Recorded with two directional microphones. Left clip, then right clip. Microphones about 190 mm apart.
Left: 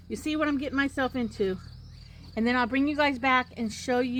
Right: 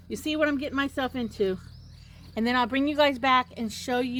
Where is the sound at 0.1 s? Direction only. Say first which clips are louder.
Right 2 dB; 35° right (ahead or behind).